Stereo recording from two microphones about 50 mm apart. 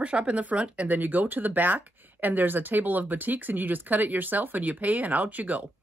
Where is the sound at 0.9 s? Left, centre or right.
Right.